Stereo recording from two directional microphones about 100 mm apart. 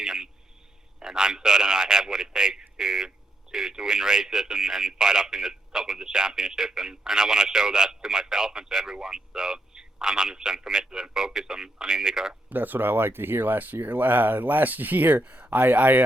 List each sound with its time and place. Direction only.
0.0 s a sound: 5° right (ahead or behind)
0.9 s a man's voice: 5° right (ahead or behind)
12.5 s a man's voice: 20° right (ahead or behind)